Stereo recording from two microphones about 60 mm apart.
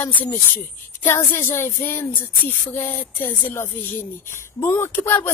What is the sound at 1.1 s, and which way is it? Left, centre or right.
A woman's voice, left.